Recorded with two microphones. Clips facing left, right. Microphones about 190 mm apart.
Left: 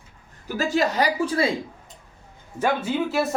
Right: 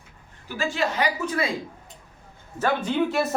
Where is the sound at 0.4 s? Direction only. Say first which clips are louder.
Left 4 dB; 40° left (ahead or behind).